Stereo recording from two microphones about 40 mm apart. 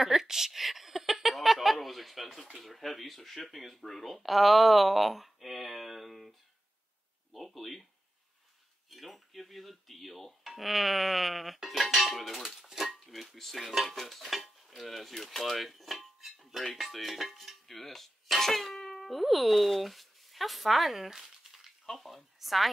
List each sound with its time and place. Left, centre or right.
0.0 s speech: centre
7.3 s speech: centre
8.9 s speech: centre
21.1 s crumpling: centre
21.8 s a woman's voice: centre